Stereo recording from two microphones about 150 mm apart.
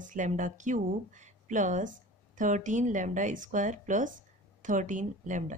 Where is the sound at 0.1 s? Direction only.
60° right (ahead or behind).